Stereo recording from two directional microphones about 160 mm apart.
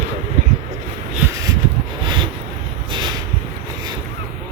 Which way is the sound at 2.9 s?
30° right (ahead or behind).